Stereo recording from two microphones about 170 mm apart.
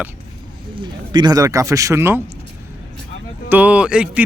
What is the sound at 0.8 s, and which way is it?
Speech, 25° right (ahead or behind).